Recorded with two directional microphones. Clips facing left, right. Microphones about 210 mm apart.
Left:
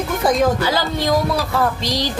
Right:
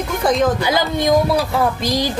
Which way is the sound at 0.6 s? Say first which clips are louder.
Right 2 dB; 15° right (ahead or behind).